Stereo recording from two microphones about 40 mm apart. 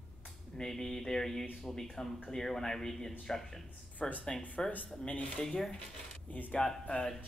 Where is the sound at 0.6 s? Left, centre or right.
Centre.